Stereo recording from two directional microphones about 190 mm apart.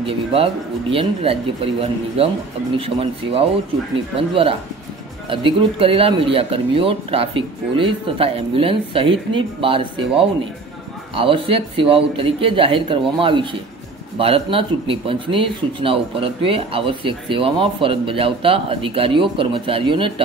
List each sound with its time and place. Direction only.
0.0 s speech: 30° right (ahead or behind)